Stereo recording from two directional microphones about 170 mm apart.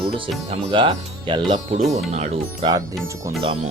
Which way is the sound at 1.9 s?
40° right (ahead or behind).